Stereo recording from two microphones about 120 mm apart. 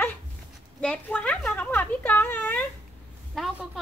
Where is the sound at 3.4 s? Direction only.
Centre (ahead or behind).